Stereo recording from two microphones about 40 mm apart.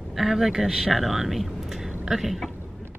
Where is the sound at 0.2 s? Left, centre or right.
Centre.